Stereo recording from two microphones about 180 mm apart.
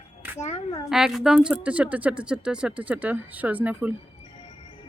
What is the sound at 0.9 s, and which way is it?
Speech, centre (ahead or behind).